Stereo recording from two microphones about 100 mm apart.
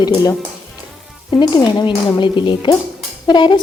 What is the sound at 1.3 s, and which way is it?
Speech, 45° left (ahead or behind).